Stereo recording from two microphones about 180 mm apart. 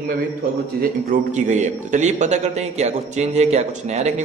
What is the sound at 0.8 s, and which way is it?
A man's voice, 45° right (ahead or behind).